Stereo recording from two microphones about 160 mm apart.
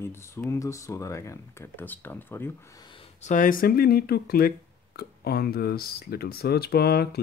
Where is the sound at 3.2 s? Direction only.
55° left (ahead or behind).